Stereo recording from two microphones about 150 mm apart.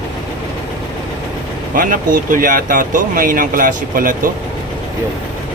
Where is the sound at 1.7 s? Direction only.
60° right (ahead or behind).